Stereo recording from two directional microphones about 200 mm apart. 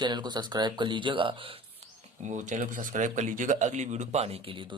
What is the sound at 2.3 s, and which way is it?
Speech, 40° right (ahead or behind).